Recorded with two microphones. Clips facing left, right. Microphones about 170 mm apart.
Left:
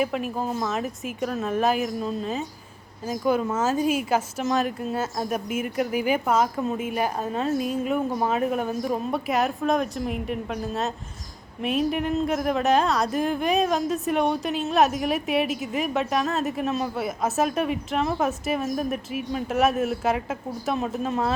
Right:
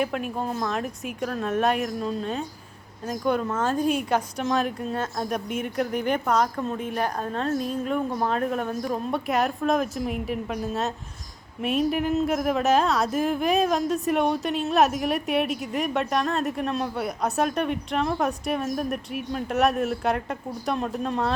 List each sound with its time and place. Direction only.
0.0 s speech: centre (ahead or behind)